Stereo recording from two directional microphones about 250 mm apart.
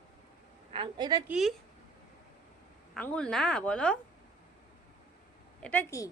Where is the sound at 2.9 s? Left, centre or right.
Centre.